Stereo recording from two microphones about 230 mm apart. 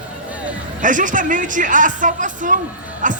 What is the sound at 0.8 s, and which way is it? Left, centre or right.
A man's voice, right.